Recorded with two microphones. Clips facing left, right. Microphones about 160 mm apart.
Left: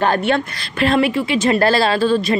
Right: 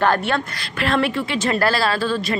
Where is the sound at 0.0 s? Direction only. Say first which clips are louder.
Left 2 dB; 20° left (ahead or behind).